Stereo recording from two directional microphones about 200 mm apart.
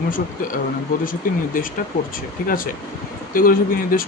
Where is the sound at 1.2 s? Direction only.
45° left (ahead or behind).